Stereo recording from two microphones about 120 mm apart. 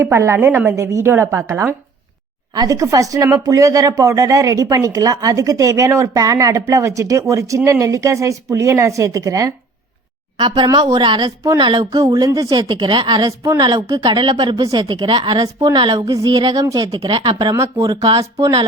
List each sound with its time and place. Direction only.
0.0 s a woman's voice: 20° right (ahead or behind)
10.3 s speech: 40° right (ahead or behind)
16.0 s a woman's voice: 30° right (ahead or behind)